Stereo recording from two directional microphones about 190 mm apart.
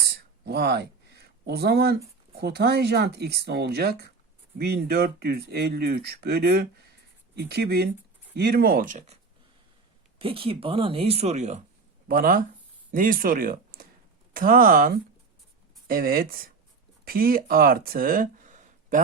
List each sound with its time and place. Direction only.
0.4 s speech: 55° right (ahead or behind); by 9.1 s 40° right (ahead or behind)
10.2 s speech: 25° right (ahead or behind)
12.0 s speech: 50° right (ahead or behind)